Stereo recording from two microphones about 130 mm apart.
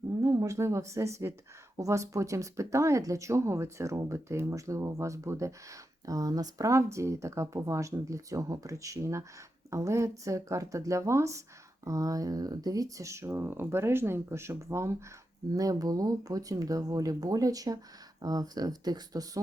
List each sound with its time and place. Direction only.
0.2 s a woman's voice: 25° right (ahead or behind)